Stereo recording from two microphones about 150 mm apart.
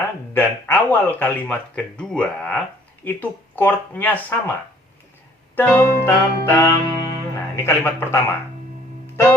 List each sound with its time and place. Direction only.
0.3 s speech: 15° left (ahead or behind)
5.5 s speech: 10° left (ahead or behind)